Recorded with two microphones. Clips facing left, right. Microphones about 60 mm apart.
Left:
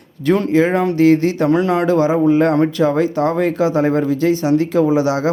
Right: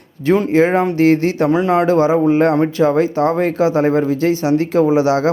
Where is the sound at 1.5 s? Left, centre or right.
Centre.